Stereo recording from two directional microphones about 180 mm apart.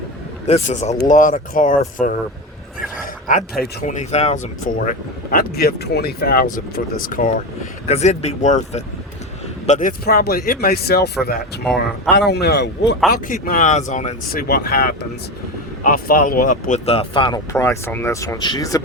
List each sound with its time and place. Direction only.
0.4 s speech: 40° left (ahead or behind)
4.7 s speech: 50° left (ahead or behind)
7.9 s speech: 35° left (ahead or behind)
10.1 s a man's voice: 60° left (ahead or behind); by 13.0 s 75° left (ahead or behind)
13.1 s speech: 55° left (ahead or behind); by 14.4 s 40° left (ahead or behind)
14.4 s speech: 55° left (ahead or behind); by 17.4 s 25° left (ahead or behind)
17.5 s speech: 15° left (ahead or behind)